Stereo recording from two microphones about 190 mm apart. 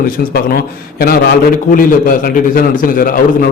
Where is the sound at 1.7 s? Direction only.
50° left (ahead or behind).